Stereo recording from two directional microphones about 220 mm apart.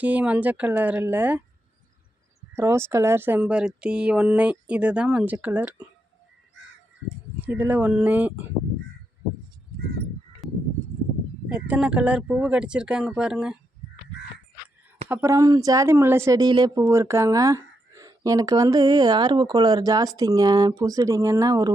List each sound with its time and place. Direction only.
0.0 s speech: 5° right (ahead or behind)
2.6 s speech: 10° right (ahead or behind)
7.4 s speech: 5° right (ahead or behind)
10.4 s a sound: centre (ahead or behind)
11.4 s speech: 5° right (ahead or behind)
15.1 s speech: 10° right (ahead or behind)